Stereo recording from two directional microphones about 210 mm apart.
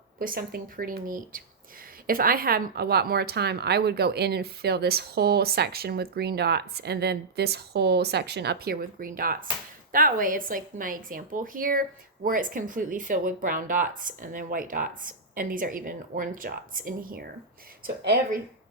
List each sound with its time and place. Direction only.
0.2 s a woman's voice: 45° right (ahead or behind)